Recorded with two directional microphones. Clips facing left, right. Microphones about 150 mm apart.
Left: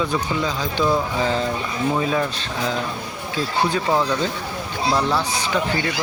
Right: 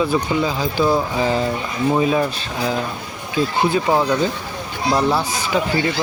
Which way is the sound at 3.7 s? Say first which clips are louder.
Right 3 dB; 15° right (ahead or behind).